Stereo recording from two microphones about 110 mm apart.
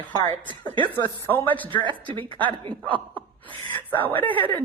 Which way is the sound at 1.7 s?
50° right (ahead or behind).